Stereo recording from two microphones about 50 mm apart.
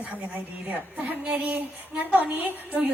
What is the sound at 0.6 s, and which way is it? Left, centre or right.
A woman's voice, right.